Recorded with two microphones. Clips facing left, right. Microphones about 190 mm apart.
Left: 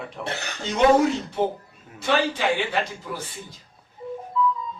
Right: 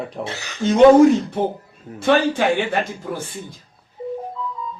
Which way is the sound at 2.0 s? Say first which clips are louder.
Right 6 dB; 50° right (ahead or behind).